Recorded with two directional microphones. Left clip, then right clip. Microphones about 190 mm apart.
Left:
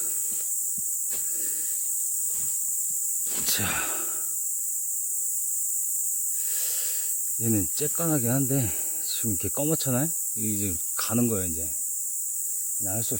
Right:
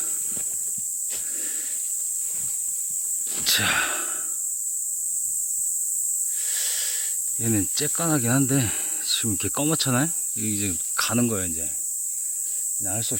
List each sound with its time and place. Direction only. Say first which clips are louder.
3.3 s a sound: right 8 dB; 5° left (ahead or behind)
6.5 s wheeze: right 4 dB; 5° left (ahead or behind)
7.4 s speech: right 2 dB; centre (ahead or behind)
12.8 s speech: right 2 dB; 10° left (ahead or behind)